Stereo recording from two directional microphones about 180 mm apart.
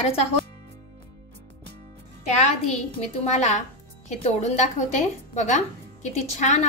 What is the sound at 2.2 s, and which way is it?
A woman's voice, 40° left (ahead or behind).